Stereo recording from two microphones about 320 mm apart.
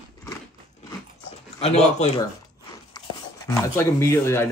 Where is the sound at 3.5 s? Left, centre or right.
Centre.